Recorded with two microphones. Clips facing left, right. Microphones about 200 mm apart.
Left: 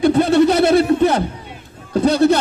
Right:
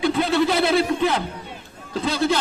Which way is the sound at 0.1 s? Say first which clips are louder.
Left 7 dB; 45° left (ahead or behind).